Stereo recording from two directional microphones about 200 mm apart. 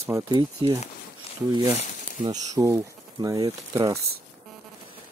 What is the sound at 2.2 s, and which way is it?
Speech, 15° right (ahead or behind).